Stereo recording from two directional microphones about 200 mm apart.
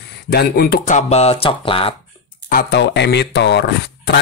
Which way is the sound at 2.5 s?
60° left (ahead or behind).